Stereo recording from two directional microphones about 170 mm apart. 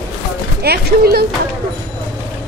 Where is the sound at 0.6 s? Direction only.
70° right (ahead or behind).